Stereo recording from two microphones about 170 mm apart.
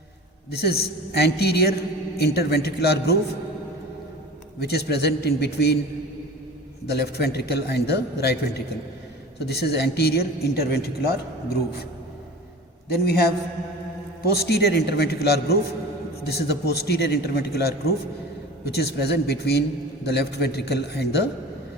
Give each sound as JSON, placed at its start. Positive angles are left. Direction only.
{"t": 0.5, "sound": "a woman's voice", "side_deg": 70}
{"t": 4.6, "sound": "a woman's voice", "side_deg": 75}
{"t": 6.8, "sound": "a woman's voice", "side_deg": 75}
{"t": 12.9, "sound": "a woman's voice", "side_deg": 70}